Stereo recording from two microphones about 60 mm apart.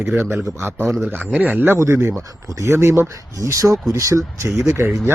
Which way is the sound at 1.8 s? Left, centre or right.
Right.